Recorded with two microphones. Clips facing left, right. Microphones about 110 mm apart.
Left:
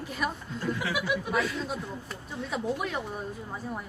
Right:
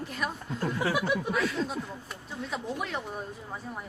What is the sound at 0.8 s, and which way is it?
Speech, 35° right (ahead or behind).